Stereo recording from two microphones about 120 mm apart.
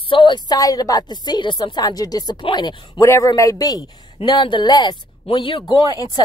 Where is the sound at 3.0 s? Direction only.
25° left (ahead or behind).